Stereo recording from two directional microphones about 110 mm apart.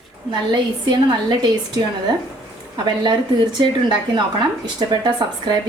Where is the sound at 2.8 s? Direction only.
45° right (ahead or behind).